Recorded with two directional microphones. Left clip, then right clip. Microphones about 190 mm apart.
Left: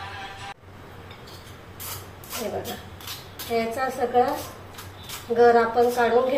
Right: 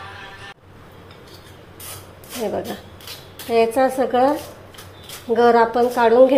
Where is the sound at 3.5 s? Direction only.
60° right (ahead or behind).